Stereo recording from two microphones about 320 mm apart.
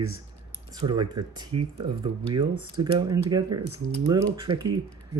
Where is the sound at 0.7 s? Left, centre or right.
Centre.